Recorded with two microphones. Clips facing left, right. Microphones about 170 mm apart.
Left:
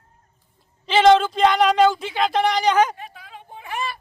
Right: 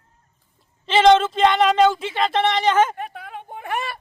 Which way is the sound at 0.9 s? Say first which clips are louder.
Even; centre (ahead or behind).